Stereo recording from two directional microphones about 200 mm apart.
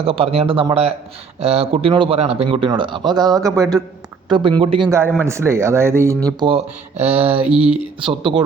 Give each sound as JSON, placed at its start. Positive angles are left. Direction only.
{"t": 0.0, "sound": "speech", "side_deg": -30}
{"t": 4.9, "sound": "speech", "side_deg": -10}
{"t": 6.2, "sound": "speech", "side_deg": -25}
{"t": 7.3, "sound": "a sound", "side_deg": -5}
{"t": 8.0, "sound": "speech", "side_deg": -25}